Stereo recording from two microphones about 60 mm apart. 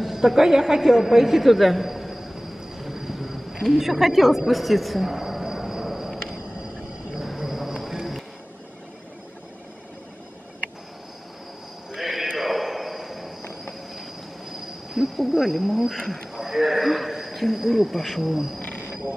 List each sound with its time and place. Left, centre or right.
0.0 s a woman's voice: centre
2.8 s thunder: centre
3.6 s a sound: centre
11.9 s horse: centre
12.4 s a sound: centre
15.0 s speech: centre
18.6 s cricket: left